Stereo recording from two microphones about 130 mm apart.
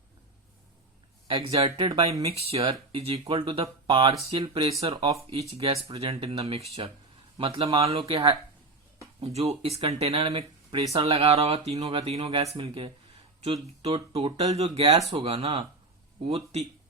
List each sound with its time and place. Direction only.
1.3 s speech: 45° right (ahead or behind)
9.2 s speech: 55° right (ahead or behind)